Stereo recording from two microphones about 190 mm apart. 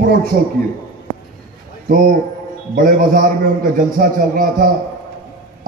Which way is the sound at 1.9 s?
45° right (ahead or behind).